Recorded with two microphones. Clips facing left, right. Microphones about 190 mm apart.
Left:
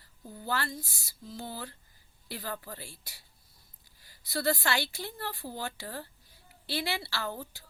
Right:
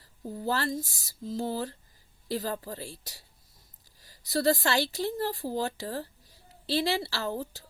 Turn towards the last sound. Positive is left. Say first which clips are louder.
# right 4 dB
turn(degrees=-35)  # may be behind; listen again after turning